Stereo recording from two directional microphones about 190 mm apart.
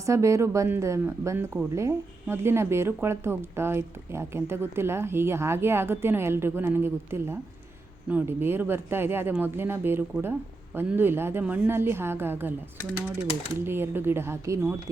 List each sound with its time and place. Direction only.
0.0 s speech: 15° right (ahead or behind)
13.7 s speech: 10° right (ahead or behind)